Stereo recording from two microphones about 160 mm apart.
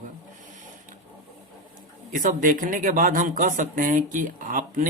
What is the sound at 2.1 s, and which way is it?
Speech, 55° right (ahead or behind).